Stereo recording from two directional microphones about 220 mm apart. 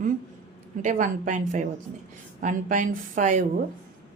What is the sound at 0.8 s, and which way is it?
A woman's voice, 35° right (ahead or behind).